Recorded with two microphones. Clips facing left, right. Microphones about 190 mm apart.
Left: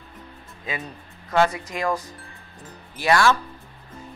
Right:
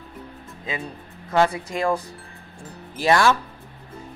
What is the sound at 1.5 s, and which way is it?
Speech, 30° right (ahead or behind).